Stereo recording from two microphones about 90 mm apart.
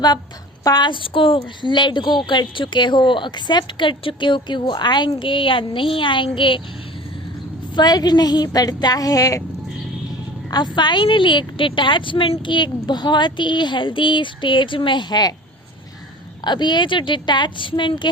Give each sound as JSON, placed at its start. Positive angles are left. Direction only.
{"t": 0.6, "sound": "a woman's voice", "side_deg": 50}
{"t": 5.1, "sound": "speech", "side_deg": 70}
{"t": 7.8, "sound": "a woman's voice", "side_deg": 50}
{"t": 10.5, "sound": "a woman's voice", "side_deg": 55}
{"t": 16.4, "sound": "a woman's voice", "side_deg": 55}